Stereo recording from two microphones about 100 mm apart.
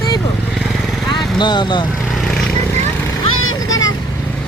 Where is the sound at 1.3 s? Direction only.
50° left (ahead or behind).